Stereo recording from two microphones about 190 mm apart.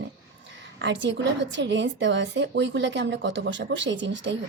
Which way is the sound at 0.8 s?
75° right (ahead or behind).